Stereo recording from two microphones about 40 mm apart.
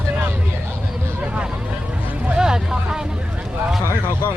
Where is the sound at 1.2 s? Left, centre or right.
Right.